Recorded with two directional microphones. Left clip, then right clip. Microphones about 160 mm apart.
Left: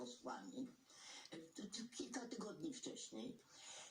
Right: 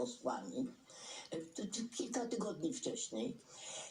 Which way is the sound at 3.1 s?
30° right (ahead or behind).